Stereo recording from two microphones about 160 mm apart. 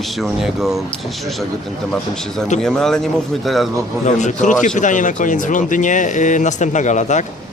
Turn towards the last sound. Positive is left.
turn(degrees=50)  # may be behind; listen again after turning